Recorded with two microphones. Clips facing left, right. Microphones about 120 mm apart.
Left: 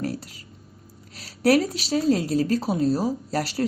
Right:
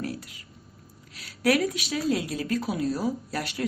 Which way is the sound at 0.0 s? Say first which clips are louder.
Left 4 dB; 40° left (ahead or behind).